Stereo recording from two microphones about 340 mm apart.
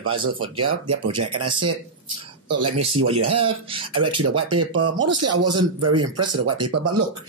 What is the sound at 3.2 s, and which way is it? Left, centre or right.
Speech, right.